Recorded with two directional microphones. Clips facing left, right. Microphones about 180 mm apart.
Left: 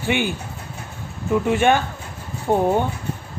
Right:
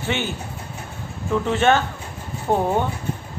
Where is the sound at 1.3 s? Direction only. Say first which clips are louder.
Left 1 dB; 15° left (ahead or behind).